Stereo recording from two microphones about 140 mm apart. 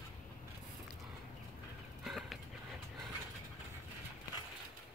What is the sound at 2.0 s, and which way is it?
Horse, centre (ahead or behind).